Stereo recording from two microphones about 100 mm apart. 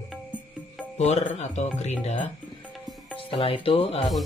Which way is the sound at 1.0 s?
90° left.